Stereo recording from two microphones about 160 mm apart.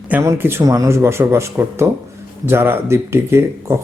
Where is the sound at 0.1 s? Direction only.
15° right (ahead or behind).